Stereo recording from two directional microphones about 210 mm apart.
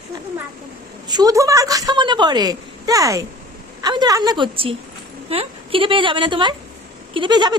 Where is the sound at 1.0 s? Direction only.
20° right (ahead or behind).